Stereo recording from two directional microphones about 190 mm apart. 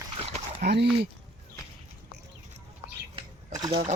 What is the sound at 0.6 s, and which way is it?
Speech, 55° right (ahead or behind).